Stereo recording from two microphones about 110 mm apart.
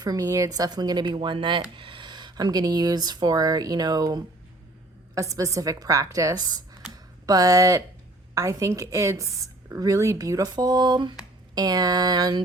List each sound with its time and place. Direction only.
0.0 s a woman's voice: 35° right (ahead or behind)